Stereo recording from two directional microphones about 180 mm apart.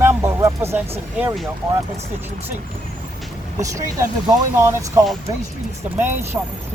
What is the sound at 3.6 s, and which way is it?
Speech, 15° right (ahead or behind).